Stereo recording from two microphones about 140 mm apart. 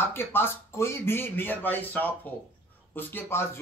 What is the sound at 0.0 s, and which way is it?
Speech, 15° left (ahead or behind).